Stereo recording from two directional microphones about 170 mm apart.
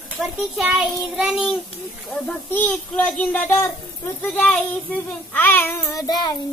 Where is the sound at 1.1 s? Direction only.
5° right (ahead or behind).